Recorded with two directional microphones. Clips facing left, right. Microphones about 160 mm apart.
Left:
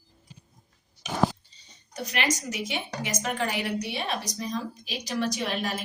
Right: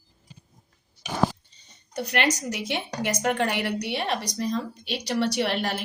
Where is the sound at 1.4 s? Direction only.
55° right (ahead or behind).